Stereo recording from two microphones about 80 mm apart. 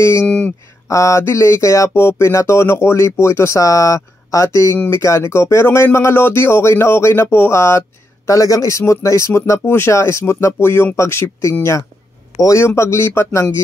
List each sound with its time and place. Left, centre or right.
0.8 s music: left